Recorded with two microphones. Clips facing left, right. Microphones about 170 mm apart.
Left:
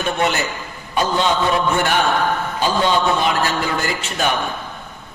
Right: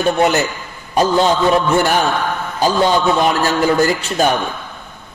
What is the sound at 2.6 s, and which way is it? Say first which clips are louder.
Speech: right 5 dB; 40° right (ahead or behind).